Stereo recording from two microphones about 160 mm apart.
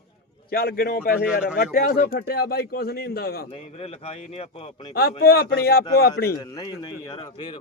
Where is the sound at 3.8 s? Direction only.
40° left (ahead or behind).